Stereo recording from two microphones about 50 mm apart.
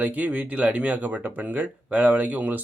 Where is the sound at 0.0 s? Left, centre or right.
Right.